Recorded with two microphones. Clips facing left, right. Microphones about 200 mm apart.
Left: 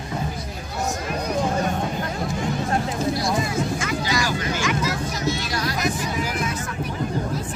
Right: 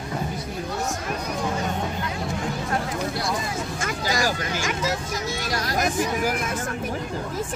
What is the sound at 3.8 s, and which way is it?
Vehicle, 45° right (ahead or behind).